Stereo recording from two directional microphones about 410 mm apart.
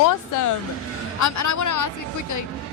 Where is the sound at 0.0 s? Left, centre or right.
Left.